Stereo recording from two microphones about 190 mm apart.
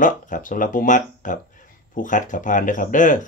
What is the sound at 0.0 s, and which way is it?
Speech, 45° left (ahead or behind).